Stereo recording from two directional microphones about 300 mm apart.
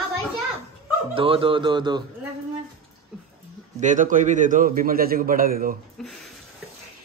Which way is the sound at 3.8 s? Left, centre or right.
Right.